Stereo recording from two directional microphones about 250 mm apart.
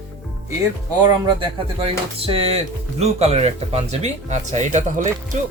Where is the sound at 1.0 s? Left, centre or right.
Right.